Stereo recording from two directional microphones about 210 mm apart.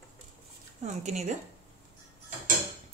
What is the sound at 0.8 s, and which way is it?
Speech, 35° right (ahead or behind).